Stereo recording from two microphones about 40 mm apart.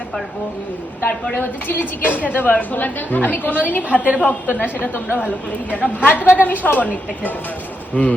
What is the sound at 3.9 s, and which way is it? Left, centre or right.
Speech, right.